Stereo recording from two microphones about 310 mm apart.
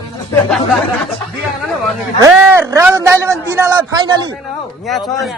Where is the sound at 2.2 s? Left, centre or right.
Centre.